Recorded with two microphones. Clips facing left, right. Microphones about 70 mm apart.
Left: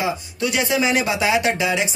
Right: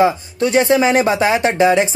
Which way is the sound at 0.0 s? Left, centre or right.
Right.